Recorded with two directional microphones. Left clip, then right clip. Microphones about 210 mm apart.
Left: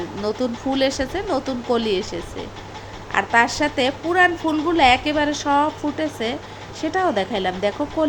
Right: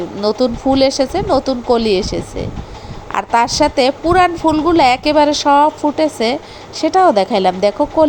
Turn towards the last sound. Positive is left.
turn(degrees=-25)  # may be behind; listen again after turning